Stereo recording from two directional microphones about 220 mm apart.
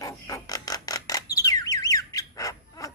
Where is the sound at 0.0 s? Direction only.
15° left (ahead or behind).